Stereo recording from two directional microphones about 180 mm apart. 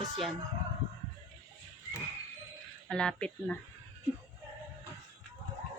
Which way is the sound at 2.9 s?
5° left (ahead or behind).